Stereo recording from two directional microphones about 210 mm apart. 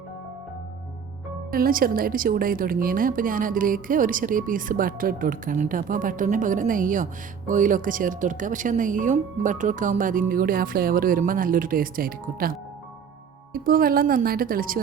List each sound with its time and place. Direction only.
1.5 s a woman's voice: 45° right (ahead or behind)